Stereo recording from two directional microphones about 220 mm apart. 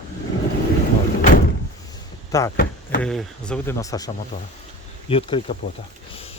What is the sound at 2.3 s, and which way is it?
Speech, 15° left (ahead or behind).